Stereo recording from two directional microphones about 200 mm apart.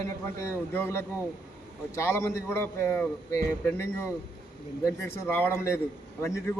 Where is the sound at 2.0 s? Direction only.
10° left (ahead or behind).